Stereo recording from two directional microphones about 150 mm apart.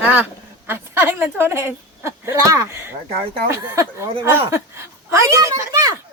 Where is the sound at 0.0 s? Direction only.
10° right (ahead or behind).